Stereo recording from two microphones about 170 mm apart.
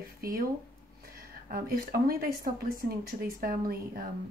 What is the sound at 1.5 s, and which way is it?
A woman's voice, 60° right (ahead or behind).